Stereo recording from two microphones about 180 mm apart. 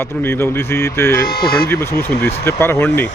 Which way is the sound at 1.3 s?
55° left (ahead or behind).